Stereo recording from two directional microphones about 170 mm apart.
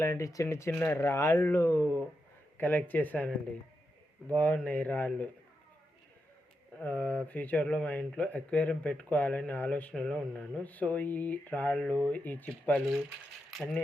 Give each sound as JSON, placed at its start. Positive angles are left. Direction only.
{"t": 0.0, "sound": "speech", "side_deg": 15}
{"t": 4.4, "sound": "speech", "side_deg": 10}
{"t": 6.7, "sound": "speech", "side_deg": 10}
{"t": 13.5, "sound": "rattle", "side_deg": 5}